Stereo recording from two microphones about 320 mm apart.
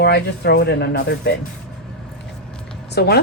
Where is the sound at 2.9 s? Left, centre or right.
Left.